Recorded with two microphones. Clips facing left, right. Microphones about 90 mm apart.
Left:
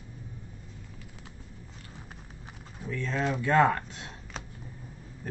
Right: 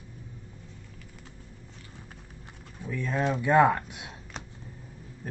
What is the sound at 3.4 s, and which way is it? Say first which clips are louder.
Speech: right 2 dB; 15° right (ahead or behind).